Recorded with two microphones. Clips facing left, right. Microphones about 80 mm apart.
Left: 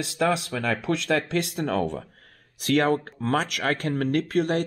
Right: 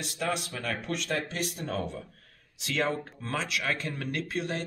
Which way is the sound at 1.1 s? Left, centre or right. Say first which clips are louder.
Left 7 dB; left.